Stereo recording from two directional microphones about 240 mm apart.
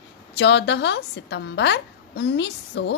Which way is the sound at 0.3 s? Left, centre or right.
Left.